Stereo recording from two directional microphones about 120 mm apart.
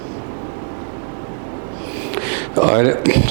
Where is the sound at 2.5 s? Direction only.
15° right (ahead or behind).